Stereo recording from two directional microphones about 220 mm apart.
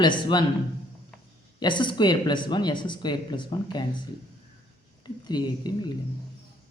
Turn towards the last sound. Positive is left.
turn(degrees=20)  # may be behind; listen again after turning